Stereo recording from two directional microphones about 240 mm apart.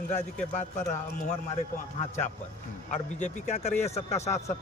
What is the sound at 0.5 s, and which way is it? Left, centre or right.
Speech, left.